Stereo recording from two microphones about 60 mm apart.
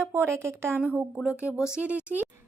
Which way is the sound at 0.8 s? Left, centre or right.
Right.